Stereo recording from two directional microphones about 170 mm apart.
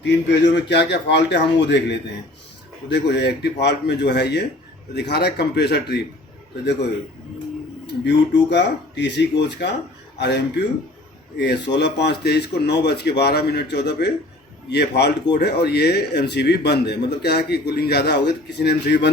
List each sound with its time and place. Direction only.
0.0 s speech: 90° left
2.9 s a man's voice: 80° left
8.0 s a man's voice: 90° left
14.7 s speech: 75° left (ahead or behind)